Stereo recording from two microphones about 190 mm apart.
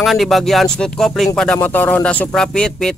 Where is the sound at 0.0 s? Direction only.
Centre (ahead or behind).